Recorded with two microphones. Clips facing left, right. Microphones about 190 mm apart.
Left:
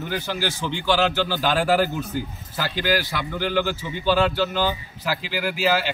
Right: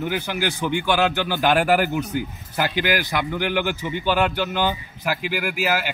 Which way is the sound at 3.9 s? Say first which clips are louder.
Left 1 dB; 55° right (ahead or behind).